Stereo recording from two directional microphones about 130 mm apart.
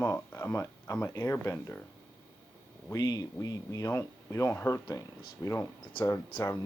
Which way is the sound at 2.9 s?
30° left (ahead or behind).